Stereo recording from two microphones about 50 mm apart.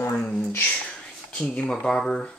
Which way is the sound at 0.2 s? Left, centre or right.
Centre.